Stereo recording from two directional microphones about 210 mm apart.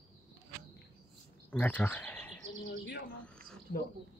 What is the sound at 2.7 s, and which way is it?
Speech, 55° left (ahead or behind).